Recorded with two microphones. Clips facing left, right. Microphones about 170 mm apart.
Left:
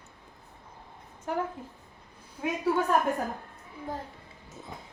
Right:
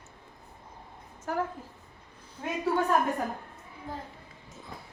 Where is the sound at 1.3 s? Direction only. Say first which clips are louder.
Even; 25° left (ahead or behind).